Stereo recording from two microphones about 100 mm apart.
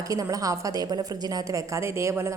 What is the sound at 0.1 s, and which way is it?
A woman's voice, 35° right (ahead or behind).